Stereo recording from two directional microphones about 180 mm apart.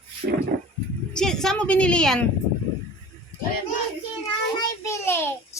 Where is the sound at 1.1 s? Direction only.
5° left (ahead or behind).